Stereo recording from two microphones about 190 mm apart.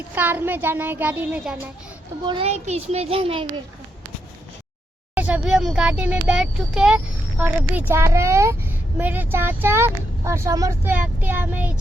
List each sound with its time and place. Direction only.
0.1 s speech: 10° right (ahead or behind)
2.2 s a child's voice: 30° right (ahead or behind)
5.1 s speech: 5° right (ahead or behind)